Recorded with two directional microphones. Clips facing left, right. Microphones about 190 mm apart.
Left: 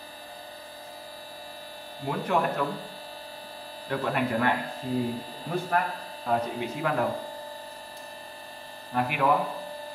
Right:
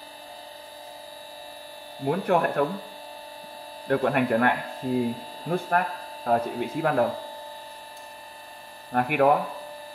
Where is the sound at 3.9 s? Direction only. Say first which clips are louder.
Right 5 dB; 55° right (ahead or behind).